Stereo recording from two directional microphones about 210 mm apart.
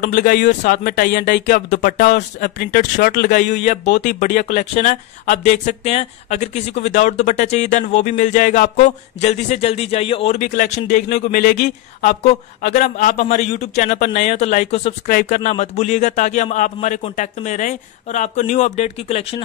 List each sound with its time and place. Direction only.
0.0 s speech: 40° left (ahead or behind)